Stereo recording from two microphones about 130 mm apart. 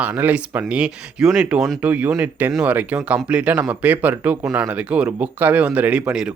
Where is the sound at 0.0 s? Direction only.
10° right (ahead or behind).